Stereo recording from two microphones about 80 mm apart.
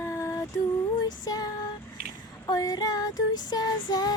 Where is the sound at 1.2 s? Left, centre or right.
Left.